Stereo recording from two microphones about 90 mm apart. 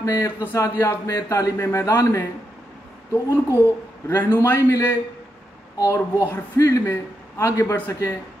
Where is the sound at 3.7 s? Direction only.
25° left (ahead or behind).